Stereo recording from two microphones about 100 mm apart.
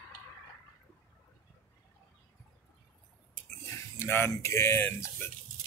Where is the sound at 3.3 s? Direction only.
20° left (ahead or behind).